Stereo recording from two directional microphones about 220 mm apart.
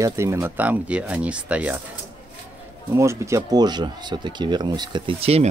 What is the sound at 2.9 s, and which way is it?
Speech, 15° right (ahead or behind).